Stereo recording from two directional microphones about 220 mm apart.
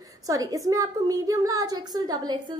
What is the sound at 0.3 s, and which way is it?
A woman's voice, 15° right (ahead or behind).